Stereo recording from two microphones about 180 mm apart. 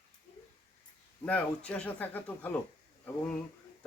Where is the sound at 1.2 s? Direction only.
10° left (ahead or behind).